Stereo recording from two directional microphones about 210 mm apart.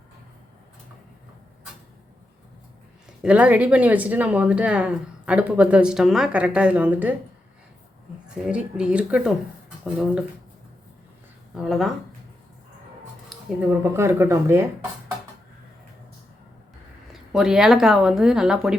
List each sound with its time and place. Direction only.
3.2 s speech: 5° right (ahead or behind)
8.4 s speech: 5° right (ahead or behind)
11.5 s speech: centre (ahead or behind)
13.3 s speech: 5° right (ahead or behind)
17.1 s speech: centre (ahead or behind)